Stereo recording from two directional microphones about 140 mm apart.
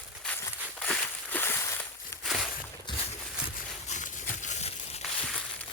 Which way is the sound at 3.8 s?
60° left (ahead or behind).